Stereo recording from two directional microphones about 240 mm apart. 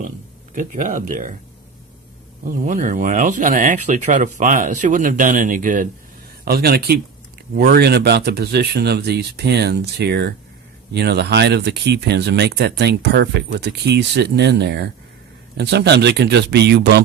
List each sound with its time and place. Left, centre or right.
0.5 s speech: right
2.4 s speech: right